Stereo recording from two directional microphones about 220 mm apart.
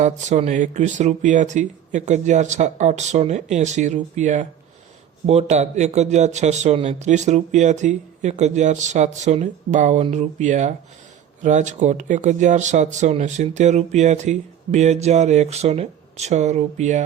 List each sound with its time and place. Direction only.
0.0 s speech: 30° right (ahead or behind)